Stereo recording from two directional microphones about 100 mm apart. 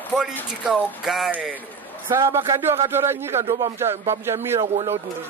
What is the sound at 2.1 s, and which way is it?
Speech, 25° right (ahead or behind).